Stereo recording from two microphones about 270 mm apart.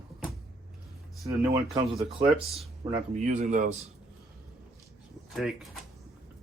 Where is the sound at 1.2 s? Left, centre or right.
Centre.